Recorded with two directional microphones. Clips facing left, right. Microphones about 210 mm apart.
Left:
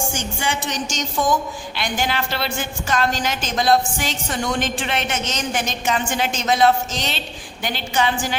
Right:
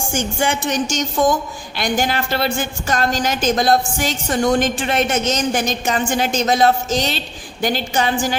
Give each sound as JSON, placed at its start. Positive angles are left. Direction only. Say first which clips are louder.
{"t": 0.1, "sound": "a woman's voice", "louder": "right 5 dB", "side_deg": -50}